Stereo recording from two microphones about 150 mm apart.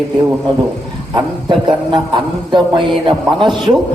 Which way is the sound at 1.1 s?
30° right (ahead or behind).